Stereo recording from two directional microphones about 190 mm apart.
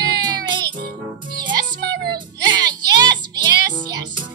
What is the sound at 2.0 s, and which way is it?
Child singing, 25° right (ahead or behind).